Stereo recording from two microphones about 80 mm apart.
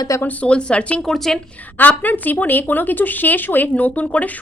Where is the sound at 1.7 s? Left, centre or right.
Left.